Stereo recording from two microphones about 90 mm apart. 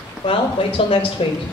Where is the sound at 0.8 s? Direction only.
90° left.